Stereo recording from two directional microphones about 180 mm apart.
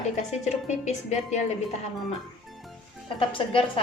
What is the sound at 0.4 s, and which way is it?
Speech, 40° left (ahead or behind).